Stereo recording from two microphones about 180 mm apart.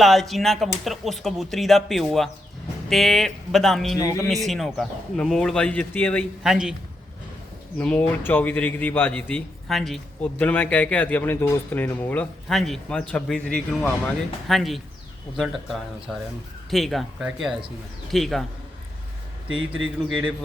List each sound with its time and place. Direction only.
0.0 s speech: centre (ahead or behind)
3.9 s speech: 20° left (ahead or behind)
4.3 s speech: centre (ahead or behind)
6.4 s speech: 5° right (ahead or behind)
7.8 s speech: 10° left (ahead or behind)